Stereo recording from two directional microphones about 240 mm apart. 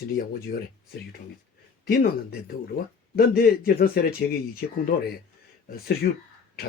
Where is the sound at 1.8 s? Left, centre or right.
Left.